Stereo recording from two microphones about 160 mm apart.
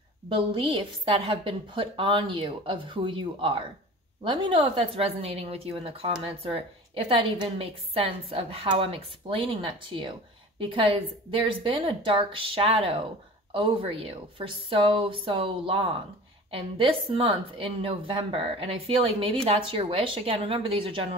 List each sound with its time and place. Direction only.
0.3 s a woman's voice: 35° right (ahead or behind)